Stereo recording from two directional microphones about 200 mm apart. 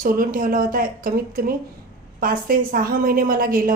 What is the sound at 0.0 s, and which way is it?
A woman's voice, 45° right (ahead or behind).